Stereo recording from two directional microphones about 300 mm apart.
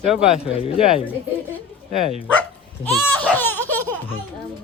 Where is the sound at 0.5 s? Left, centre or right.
Centre.